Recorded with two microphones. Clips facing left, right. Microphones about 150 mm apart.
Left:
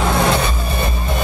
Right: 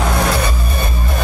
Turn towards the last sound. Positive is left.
turn(degrees=25)  # may be behind; listen again after turning